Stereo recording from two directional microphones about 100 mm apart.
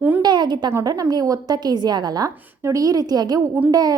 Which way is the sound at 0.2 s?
45° right (ahead or behind).